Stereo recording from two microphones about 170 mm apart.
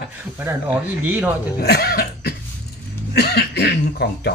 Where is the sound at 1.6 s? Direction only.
70° left (ahead or behind).